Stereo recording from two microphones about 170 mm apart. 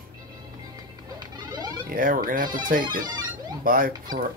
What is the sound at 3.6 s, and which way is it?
Speech, 55° right (ahead or behind).